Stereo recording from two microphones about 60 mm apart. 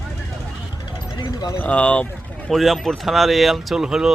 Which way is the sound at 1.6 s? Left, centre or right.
Left.